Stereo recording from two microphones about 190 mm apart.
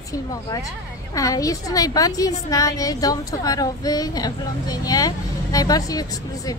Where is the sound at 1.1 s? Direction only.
15° left (ahead or behind).